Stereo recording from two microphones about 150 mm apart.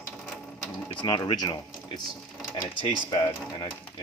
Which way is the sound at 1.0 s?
30° left (ahead or behind).